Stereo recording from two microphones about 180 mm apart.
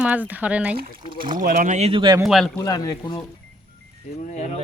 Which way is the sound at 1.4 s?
45° right (ahead or behind).